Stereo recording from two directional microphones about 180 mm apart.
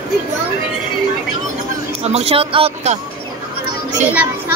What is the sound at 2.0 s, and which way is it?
Speech, 35° right (ahead or behind).